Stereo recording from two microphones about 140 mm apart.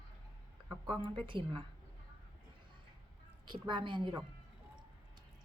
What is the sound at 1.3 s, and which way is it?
Speech, 35° right (ahead or behind).